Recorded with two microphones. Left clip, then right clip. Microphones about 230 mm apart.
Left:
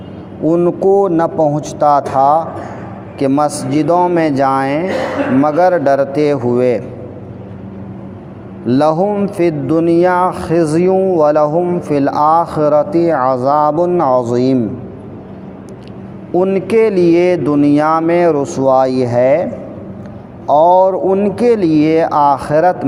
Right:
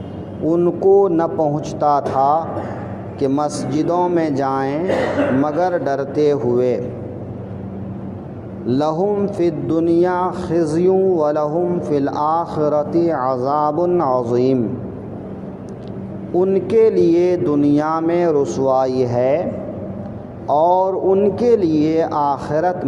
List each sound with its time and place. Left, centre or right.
0.4 s a man's voice: left
8.6 s a man's voice: left
16.3 s a man's voice: left
20.5 s a man's voice: left